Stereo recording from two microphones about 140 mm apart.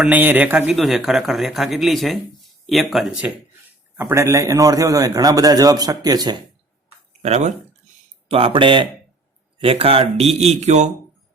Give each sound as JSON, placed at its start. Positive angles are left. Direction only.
{"t": 0.0, "sound": "speech", "side_deg": -10}
{"t": 3.9, "sound": "a man's voice", "side_deg": -20}
{"t": 7.2, "sound": "speech", "side_deg": -50}
{"t": 8.3, "sound": "speech", "side_deg": -40}